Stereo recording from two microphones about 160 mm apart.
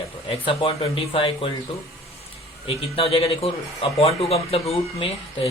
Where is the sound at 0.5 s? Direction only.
35° left (ahead or behind).